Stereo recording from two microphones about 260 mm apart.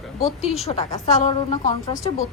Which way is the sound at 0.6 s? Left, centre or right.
Left.